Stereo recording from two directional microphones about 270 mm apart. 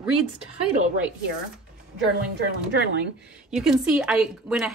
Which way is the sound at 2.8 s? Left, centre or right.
Right.